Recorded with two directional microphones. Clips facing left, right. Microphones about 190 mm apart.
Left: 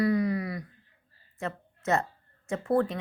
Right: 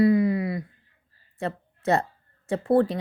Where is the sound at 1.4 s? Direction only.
35° right (ahead or behind).